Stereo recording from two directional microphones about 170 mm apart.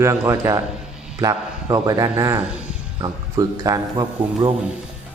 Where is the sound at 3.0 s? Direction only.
20° right (ahead or behind).